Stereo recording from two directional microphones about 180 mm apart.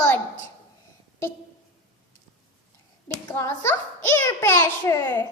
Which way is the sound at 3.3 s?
15° left (ahead or behind).